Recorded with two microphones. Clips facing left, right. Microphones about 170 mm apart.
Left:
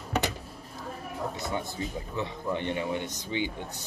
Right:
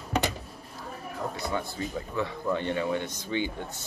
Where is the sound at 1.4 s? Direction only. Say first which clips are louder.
Right 1 dB; 20° left (ahead or behind).